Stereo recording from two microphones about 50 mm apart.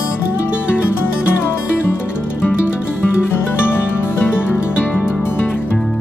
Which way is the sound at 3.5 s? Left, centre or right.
Left.